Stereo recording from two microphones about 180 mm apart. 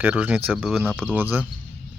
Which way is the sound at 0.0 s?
10° right (ahead or behind).